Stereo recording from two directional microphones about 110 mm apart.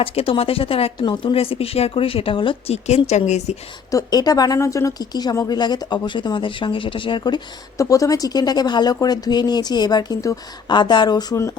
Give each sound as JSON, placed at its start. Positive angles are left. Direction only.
{"t": 0.0, "sound": "speech", "side_deg": 60}
{"t": 2.7, "sound": "a woman's voice", "side_deg": 85}
{"t": 3.9, "sound": "speech", "side_deg": 35}
{"t": 7.8, "sound": "speech", "side_deg": 30}